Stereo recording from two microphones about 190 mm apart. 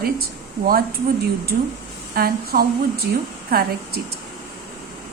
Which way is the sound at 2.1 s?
55° right (ahead or behind).